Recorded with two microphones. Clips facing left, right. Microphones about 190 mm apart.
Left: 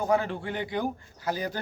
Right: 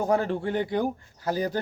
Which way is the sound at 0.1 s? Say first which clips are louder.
Right 1 dB; 40° right (ahead or behind).